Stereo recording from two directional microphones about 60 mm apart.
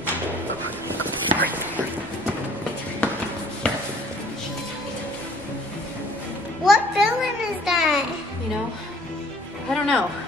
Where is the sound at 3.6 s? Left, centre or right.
Centre.